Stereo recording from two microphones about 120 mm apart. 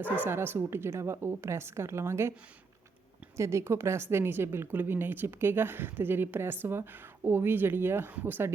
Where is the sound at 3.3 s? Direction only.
25° right (ahead or behind).